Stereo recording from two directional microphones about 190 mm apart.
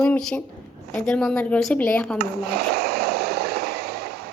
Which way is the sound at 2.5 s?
55° right (ahead or behind).